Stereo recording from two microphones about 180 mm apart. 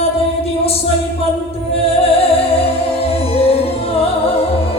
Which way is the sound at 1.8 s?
35° left (ahead or behind).